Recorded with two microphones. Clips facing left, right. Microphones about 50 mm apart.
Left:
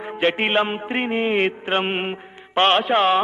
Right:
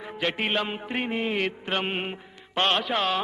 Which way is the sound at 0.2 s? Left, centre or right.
Left.